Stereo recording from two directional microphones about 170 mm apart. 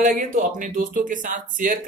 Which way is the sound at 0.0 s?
50° right (ahead or behind).